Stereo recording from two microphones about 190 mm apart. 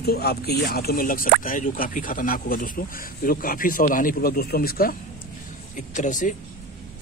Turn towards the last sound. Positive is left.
turn(degrees=40)  # may be behind; listen again after turning